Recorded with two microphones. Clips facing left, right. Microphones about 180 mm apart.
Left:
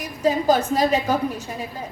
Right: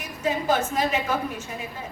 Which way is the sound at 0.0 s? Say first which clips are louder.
Left 6 dB; 35° left (ahead or behind).